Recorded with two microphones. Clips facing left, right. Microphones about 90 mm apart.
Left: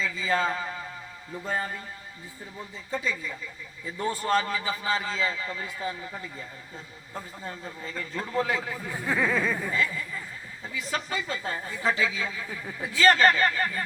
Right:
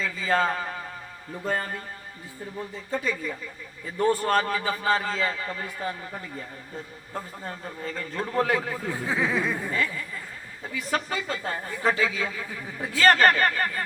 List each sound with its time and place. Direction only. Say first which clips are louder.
0.0 s a man's voice: right 2 dB; 50° right (ahead or behind)
2.9 s speech: right 2 dB; 50° right (ahead or behind)
7.4 s speech: right 3 dB; 45° right (ahead or behind)
9.0 s speech: left 1 dB; 15° right (ahead or behind)
10.6 s speech: right 4 dB; 50° right (ahead or behind)